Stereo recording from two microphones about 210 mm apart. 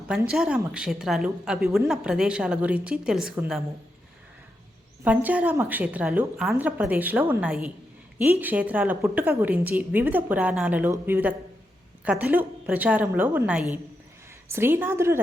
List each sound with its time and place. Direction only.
0.1 s a woman's voice: 5° right (ahead or behind)
5.0 s a woman's voice: 5° right (ahead or behind)